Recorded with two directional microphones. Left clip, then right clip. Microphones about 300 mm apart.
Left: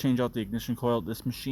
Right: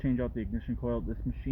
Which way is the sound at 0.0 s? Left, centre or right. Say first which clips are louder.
Left 5 dB; left.